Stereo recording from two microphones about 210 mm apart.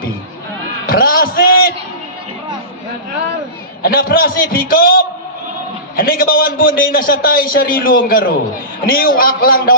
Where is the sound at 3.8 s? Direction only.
45° left (ahead or behind).